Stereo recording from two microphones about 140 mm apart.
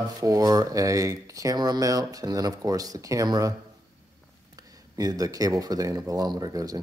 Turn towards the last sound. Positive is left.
turn(degrees=-25)  # may be behind; listen again after turning